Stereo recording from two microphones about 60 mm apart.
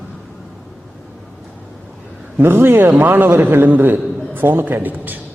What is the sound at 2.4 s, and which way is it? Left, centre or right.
A man's voice, right.